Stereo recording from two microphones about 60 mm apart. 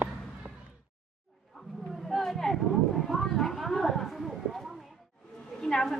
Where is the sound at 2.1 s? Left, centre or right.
Centre.